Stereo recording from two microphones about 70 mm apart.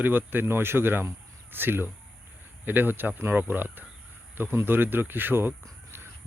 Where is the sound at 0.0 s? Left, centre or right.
Right.